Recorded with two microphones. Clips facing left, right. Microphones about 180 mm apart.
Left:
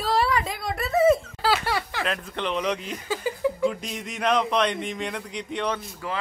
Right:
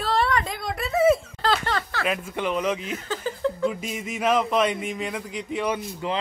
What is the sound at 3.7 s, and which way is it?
A man's voice, 5° right (ahead or behind).